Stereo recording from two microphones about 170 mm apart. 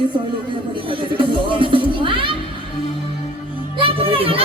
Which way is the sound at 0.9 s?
30° right (ahead or behind).